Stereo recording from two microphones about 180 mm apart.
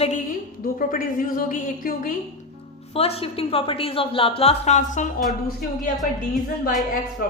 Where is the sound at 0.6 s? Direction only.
50° left (ahead or behind).